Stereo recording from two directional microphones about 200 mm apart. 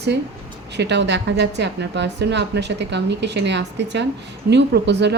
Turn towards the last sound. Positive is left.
turn(degrees=-60)  # may be behind; listen again after turning